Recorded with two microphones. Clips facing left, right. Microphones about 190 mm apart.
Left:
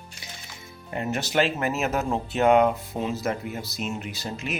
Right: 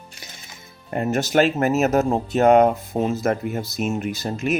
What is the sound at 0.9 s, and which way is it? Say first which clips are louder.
Speech: right 6 dB; 45° right (ahead or behind).